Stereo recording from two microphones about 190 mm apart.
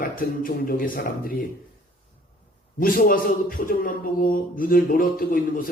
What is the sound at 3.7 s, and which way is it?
Speech, 45° left (ahead or behind).